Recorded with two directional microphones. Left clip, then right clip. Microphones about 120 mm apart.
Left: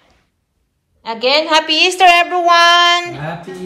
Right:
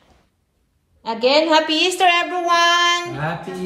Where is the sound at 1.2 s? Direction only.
30° right (ahead or behind).